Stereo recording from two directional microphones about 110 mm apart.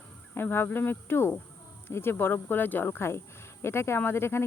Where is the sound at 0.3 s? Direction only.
20° left (ahead or behind).